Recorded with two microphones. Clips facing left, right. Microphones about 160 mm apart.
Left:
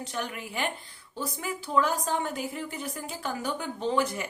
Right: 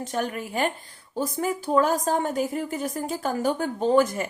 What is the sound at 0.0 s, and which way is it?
Speech, 45° right (ahead or behind).